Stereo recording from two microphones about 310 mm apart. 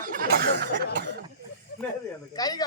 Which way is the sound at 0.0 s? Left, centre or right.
Right.